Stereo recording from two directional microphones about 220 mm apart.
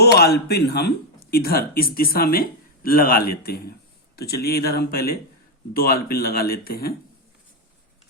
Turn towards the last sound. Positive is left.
turn(degrees=45)  # may be behind; listen again after turning